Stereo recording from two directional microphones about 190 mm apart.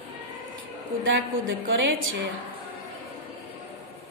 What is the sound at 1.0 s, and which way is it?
A woman's voice, 90° right.